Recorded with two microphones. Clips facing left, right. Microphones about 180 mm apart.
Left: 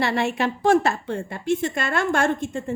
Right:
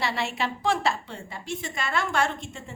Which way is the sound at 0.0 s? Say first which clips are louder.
Left 6 dB; 55° left (ahead or behind).